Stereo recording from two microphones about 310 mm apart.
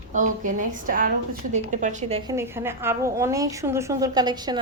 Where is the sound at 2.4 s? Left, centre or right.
Centre.